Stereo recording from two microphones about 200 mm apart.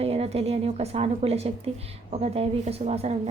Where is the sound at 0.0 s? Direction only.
30° right (ahead or behind).